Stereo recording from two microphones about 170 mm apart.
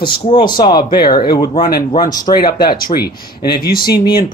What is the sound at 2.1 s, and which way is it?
Speech, 25° left (ahead or behind).